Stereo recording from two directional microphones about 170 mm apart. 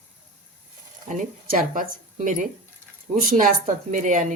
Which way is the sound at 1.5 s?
55° right (ahead or behind).